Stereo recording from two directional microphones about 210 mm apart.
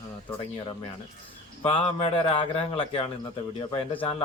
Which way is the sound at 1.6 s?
25° left (ahead or behind).